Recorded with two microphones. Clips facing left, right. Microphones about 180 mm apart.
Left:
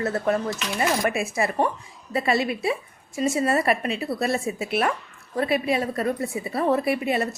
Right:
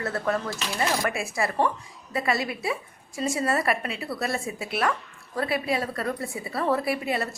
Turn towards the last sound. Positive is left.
turn(degrees=20)  # may be behind; listen again after turning